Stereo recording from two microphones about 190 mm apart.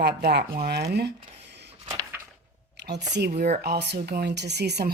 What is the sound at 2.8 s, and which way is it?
Speech, 65° right (ahead or behind).